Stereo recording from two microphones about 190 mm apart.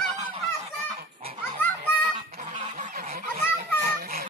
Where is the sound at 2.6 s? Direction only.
40° right (ahead or behind).